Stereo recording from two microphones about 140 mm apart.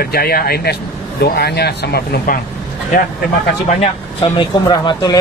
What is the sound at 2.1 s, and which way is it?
Speech, 85° left.